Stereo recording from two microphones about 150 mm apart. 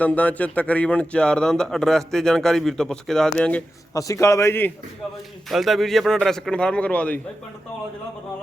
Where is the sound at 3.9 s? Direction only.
20° left (ahead or behind).